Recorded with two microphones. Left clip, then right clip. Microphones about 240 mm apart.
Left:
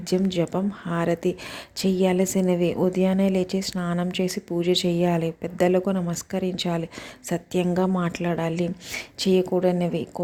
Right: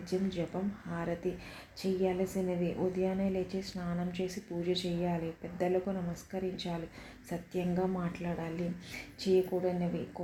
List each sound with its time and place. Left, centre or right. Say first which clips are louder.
0.1 s a woman's voice: left 11 dB; left